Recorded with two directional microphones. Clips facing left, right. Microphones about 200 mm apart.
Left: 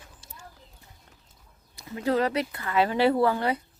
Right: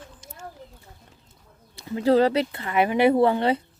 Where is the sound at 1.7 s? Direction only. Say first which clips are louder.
Right 6 dB; 30° right (ahead or behind).